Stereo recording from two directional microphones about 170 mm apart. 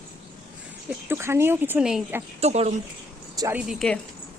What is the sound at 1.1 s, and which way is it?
Speech, 15° right (ahead or behind).